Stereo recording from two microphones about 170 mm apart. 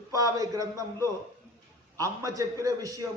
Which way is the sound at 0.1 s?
20° right (ahead or behind).